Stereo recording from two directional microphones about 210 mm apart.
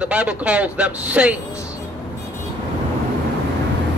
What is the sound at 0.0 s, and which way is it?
A man's voice, 5° right (ahead or behind).